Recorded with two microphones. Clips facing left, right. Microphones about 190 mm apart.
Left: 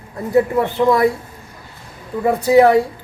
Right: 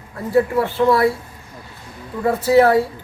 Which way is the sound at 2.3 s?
15° left (ahead or behind).